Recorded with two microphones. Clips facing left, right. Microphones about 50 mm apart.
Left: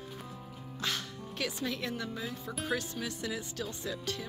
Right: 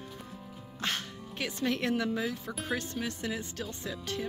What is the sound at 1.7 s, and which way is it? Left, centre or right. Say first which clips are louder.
Speech: right 7 dB; right.